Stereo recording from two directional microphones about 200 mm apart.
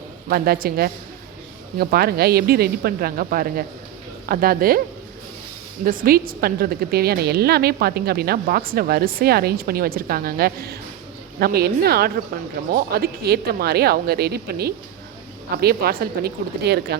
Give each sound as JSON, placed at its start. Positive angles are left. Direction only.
{"t": 0.3, "sound": "a woman's voice", "side_deg": -50}
{"t": 5.8, "sound": "a woman's voice", "side_deg": -45}